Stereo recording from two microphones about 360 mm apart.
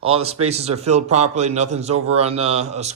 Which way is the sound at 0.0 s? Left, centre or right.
Centre.